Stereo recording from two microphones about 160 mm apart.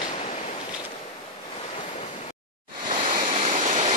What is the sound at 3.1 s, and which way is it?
Vehicle, 55° right (ahead or behind).